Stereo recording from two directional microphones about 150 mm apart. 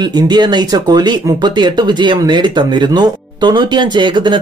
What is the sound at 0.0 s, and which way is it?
Speech, 30° right (ahead or behind).